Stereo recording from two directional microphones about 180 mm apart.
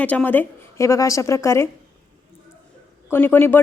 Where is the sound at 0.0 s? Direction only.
10° left (ahead or behind).